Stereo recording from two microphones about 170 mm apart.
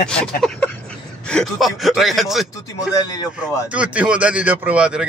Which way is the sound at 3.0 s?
20° left (ahead or behind).